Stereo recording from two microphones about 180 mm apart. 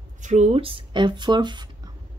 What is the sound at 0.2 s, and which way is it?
Speech, 40° right (ahead or behind).